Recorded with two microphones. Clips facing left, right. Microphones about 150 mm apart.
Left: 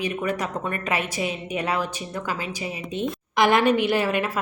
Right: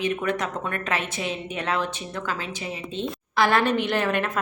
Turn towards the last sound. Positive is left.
turn(degrees=10)  # may be behind; listen again after turning